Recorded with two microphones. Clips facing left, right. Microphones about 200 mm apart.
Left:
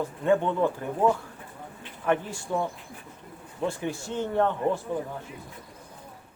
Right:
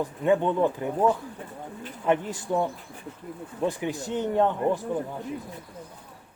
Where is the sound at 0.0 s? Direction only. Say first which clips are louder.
Right 1 dB; 15° right (ahead or behind).